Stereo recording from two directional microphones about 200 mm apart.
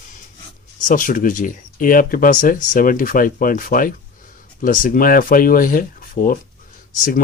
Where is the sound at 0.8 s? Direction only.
40° left (ahead or behind).